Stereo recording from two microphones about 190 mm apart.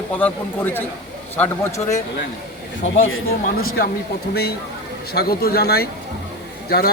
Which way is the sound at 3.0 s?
90° left.